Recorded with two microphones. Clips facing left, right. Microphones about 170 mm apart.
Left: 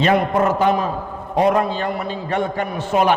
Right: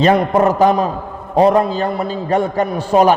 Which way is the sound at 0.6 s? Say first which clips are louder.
Right 4 dB; 35° right (ahead or behind).